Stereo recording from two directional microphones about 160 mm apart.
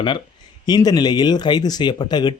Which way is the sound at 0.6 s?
25° left (ahead or behind).